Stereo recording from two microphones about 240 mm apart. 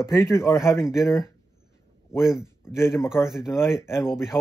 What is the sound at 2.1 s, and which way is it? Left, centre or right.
Speech, centre.